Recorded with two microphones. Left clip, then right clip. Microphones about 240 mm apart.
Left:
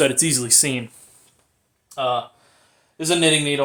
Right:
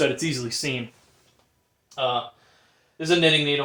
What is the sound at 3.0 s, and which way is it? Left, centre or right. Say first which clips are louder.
Speech: left 1 dB; left.